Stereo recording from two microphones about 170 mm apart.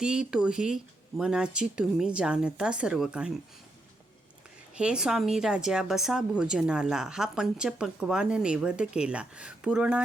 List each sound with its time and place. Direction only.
0.0 s a woman's voice: 5° right (ahead or behind)
4.7 s a woman's voice: 5° right (ahead or behind)